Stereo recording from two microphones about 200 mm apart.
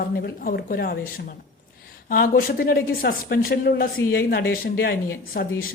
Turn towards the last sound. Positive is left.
turn(degrees=45)  # may be behind; listen again after turning